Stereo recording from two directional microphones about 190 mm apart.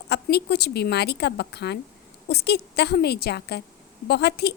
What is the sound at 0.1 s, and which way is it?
A woman's voice, 60° left (ahead or behind).